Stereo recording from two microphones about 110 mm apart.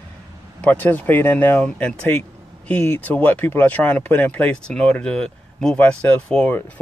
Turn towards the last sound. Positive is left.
turn(degrees=10)  # may be behind; listen again after turning